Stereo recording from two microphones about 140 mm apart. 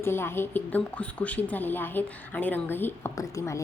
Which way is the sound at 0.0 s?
15° left (ahead or behind).